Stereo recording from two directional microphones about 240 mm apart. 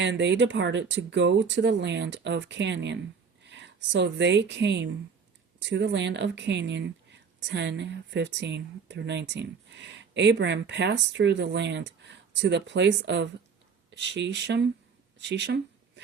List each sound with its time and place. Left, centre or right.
0.0 s speech: right